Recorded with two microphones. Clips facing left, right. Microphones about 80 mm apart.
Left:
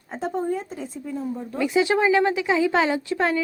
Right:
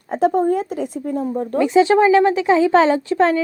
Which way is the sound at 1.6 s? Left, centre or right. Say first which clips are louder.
Right 6 dB; right.